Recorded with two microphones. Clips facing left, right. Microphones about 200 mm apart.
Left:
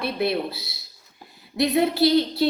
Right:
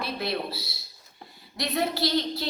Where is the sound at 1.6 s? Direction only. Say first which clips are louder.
Left 7 dB; 25° left (ahead or behind).